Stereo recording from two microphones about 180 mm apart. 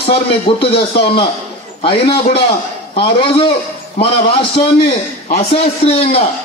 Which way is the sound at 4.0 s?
30° left (ahead or behind).